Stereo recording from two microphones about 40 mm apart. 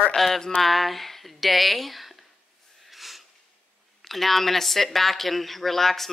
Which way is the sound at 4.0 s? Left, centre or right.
Centre.